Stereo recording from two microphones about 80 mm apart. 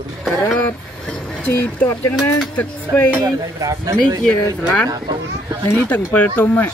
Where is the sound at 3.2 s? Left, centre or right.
Right.